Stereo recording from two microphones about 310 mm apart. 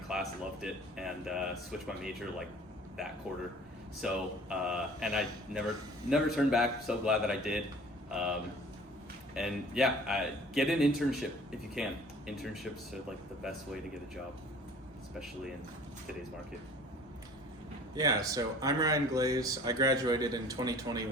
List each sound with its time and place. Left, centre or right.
0.1 s a man's voice: centre
4.0 s a man's voice: centre
17.9 s speech: centre